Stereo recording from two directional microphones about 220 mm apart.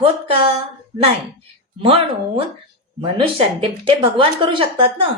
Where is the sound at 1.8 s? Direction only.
25° right (ahead or behind).